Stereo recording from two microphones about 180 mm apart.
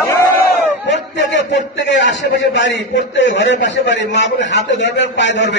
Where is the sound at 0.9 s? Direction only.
80° left.